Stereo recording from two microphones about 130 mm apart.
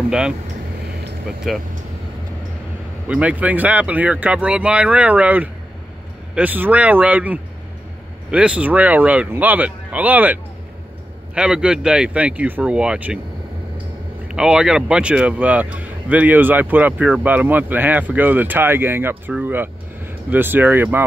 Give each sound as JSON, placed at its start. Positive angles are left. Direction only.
{"t": 1.5, "sound": "speech", "side_deg": 0}
{"t": 3.1, "sound": "speech", "side_deg": -10}
{"t": 14.2, "sound": "speech", "side_deg": -5}